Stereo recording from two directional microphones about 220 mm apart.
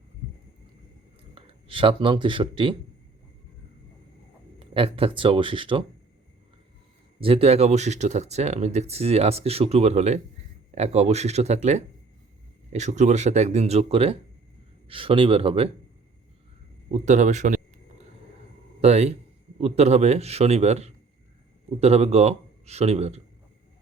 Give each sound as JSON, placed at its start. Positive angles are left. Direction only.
{"t": 1.4, "sound": "speech", "side_deg": -25}
{"t": 4.6, "sound": "speech", "side_deg": -25}
{"t": 7.2, "sound": "speech", "side_deg": -25}
{"t": 16.9, "sound": "a sound", "side_deg": -30}
{"t": 18.8, "sound": "speech", "side_deg": -30}